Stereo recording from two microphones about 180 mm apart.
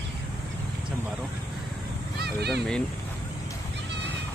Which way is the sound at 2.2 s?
65° right (ahead or behind).